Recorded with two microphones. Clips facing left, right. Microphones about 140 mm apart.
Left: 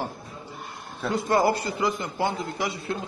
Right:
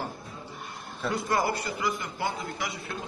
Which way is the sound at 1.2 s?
30° left (ahead or behind).